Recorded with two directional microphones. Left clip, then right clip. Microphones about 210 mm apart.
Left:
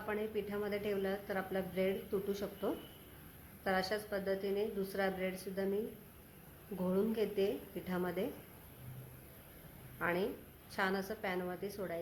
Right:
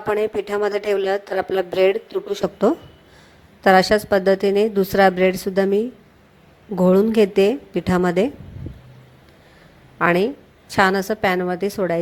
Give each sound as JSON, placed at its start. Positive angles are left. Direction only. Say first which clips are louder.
{"t": 0.1, "sound": "a woman's voice", "louder": "right 19 dB", "side_deg": -40}
{"t": 10.0, "sound": "a woman's voice", "louder": "right 19 dB", "side_deg": -35}